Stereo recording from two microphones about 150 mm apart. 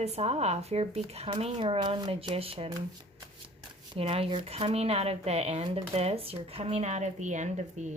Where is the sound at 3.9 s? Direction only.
40° right (ahead or behind).